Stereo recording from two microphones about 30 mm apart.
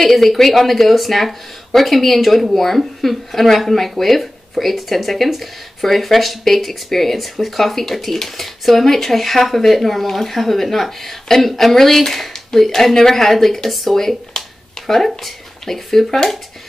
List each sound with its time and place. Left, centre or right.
0.1 s speech: centre